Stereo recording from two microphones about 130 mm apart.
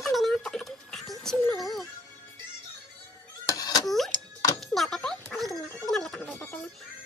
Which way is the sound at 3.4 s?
25° left (ahead or behind).